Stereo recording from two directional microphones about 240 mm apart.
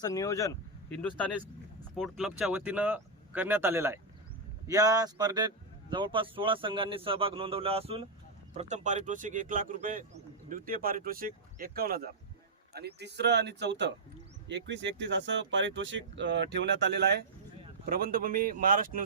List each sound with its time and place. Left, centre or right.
0.0 s a man's voice: centre; by 19.0 s right